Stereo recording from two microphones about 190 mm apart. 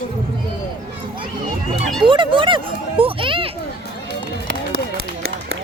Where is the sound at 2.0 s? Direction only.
25° right (ahead or behind).